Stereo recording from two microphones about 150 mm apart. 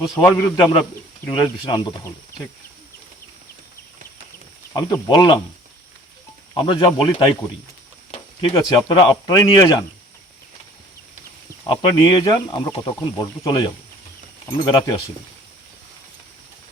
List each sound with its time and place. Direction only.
0.2 s speech: 20° left (ahead or behind)
0.6 s speech: 35° left (ahead or behind)
4.7 s speech: 25° left (ahead or behind)
6.5 s speech: 30° left (ahead or behind)
8.4 s speech: 30° left (ahead or behind)
11.6 s speech: 35° left (ahead or behind)